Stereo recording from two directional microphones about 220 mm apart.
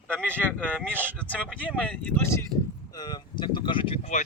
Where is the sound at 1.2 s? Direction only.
5° left (ahead or behind).